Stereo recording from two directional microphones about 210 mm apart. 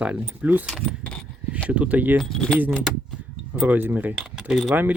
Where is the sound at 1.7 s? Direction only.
5° right (ahead or behind).